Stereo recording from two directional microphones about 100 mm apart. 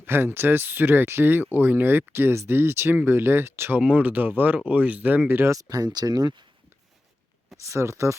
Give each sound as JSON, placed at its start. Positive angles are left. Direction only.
{"t": 0.0, "sound": "speech", "side_deg": -25}
{"t": 3.8, "sound": "speech", "side_deg": -15}
{"t": 5.5, "sound": "speech", "side_deg": -35}
{"t": 7.6, "sound": "speech", "side_deg": -30}